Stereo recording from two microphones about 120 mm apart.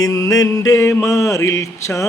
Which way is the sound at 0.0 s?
30° left (ahead or behind).